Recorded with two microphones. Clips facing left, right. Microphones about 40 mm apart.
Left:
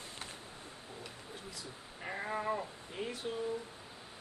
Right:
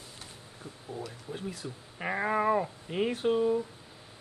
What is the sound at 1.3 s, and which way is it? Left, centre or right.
Speech, right.